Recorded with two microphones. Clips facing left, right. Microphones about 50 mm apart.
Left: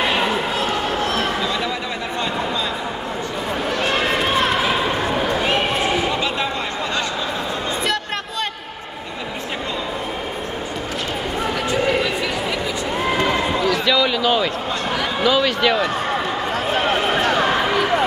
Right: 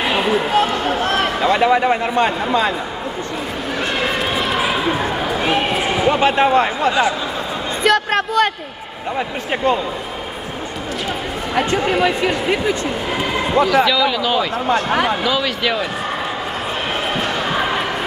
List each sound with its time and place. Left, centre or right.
0.0 s run: centre
1.1 s a man's voice: right
6.0 s speech: right
6.9 s a man's voice: centre
7.8 s a sound: right
11.5 s speech: right
13.7 s a man's voice: centre
14.7 s speech: right
15.2 s a man's voice: centre